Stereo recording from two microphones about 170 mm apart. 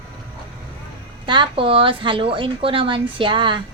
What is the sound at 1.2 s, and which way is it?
A woman's voice, 30° right (ahead or behind).